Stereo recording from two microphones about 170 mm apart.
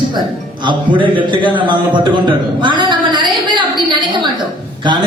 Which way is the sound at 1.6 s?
30° right (ahead or behind).